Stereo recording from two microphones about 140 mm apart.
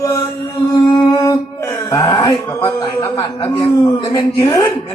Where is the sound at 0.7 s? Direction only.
25° left (ahead or behind).